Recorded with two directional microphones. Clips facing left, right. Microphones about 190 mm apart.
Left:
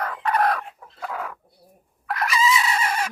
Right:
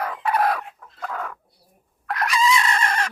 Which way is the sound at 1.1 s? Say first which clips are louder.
Even; 5° left (ahead or behind).